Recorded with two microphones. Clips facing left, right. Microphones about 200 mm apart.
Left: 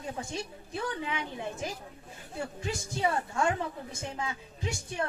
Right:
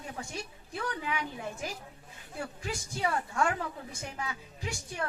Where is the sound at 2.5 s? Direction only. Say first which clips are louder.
Left 3 dB; 25° left (ahead or behind).